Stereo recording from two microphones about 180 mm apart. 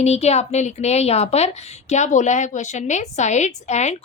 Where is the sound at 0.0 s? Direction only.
35° left (ahead or behind).